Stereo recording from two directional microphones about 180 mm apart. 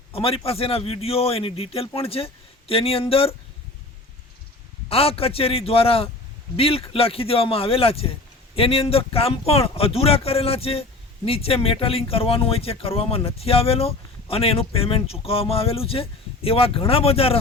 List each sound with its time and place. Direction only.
0.1 s speech: 30° left (ahead or behind)
4.9 s speech: 30° left (ahead or behind)